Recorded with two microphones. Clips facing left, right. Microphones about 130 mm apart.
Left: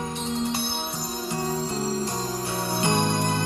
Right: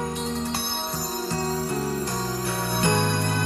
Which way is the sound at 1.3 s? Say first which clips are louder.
Even; 20° left (ahead or behind).